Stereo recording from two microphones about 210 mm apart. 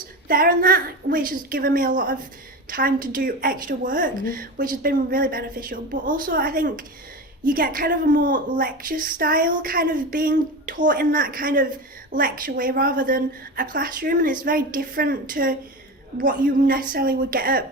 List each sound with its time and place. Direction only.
0.3 s a woman's voice: 45° right (ahead or behind)